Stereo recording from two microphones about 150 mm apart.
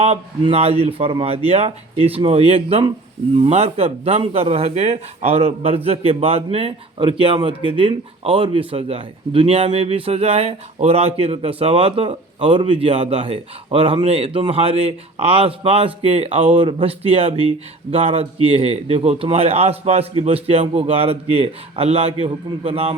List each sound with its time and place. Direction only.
0.0 s speech: 45° right (ahead or behind)